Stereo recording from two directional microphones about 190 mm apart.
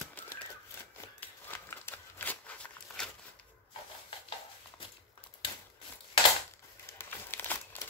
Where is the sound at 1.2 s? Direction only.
10° left (ahead or behind).